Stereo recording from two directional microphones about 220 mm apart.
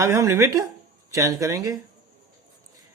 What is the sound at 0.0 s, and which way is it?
Speech, 15° right (ahead or behind).